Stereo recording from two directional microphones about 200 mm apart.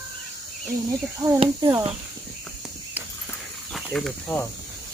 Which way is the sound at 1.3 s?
25° right (ahead or behind).